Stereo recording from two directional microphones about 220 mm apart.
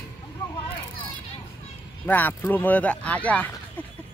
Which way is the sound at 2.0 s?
10° left (ahead or behind).